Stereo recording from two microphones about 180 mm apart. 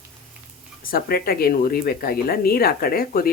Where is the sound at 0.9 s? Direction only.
55° left (ahead or behind).